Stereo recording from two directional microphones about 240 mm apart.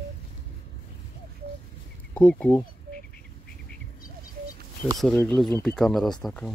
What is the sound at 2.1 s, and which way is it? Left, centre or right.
Speech, centre.